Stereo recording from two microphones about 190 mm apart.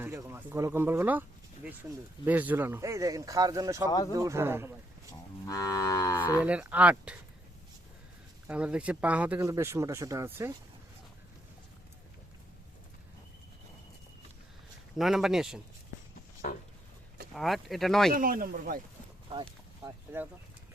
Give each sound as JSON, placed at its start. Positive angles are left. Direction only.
{"t": 0.0, "sound": "speech", "side_deg": -15}
{"t": 3.8, "sound": "speech", "side_deg": 20}
{"t": 4.1, "sound": "speech", "side_deg": -15}
{"t": 5.5, "sound": "livestock", "side_deg": 20}
{"t": 6.4, "sound": "speech", "side_deg": -5}
{"t": 8.4, "sound": "speech", "side_deg": -5}
{"t": 14.9, "sound": "speech", "side_deg": 0}
{"t": 16.4, "sound": "speech", "side_deg": 45}
{"t": 17.3, "sound": "speech", "side_deg": 0}
{"t": 18.1, "sound": "speech", "side_deg": -45}
{"t": 19.3, "sound": "speech", "side_deg": -30}
{"t": 20.1, "sound": "speech", "side_deg": -10}